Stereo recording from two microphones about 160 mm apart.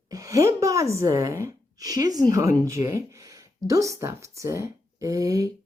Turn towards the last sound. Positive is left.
turn(degrees=-20)  # may be behind; listen again after turning